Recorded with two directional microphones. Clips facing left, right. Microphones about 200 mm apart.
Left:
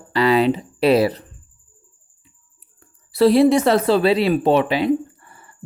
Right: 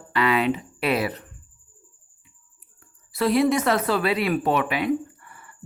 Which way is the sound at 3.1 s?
30° left (ahead or behind).